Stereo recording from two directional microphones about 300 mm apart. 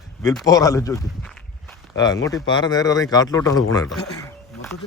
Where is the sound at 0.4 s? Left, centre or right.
Centre.